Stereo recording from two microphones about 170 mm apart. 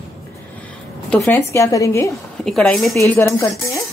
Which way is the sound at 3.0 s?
15° left (ahead or behind).